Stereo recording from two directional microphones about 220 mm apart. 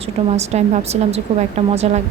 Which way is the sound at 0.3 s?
30° right (ahead or behind).